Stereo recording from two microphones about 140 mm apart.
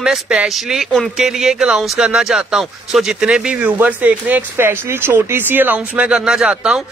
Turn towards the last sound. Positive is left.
turn(degrees=-5)  # may be behind; listen again after turning